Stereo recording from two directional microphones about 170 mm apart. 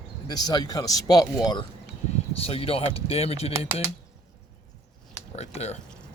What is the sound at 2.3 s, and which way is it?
Speech, 35° left (ahead or behind).